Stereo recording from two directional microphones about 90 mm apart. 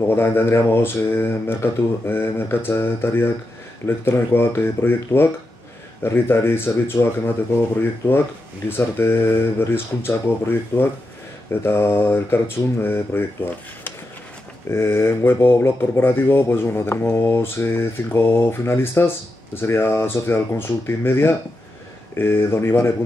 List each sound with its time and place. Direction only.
0.1 s speech: 25° left (ahead or behind)
8.6 s speech: 25° left (ahead or behind)
14.7 s speech: 30° left (ahead or behind)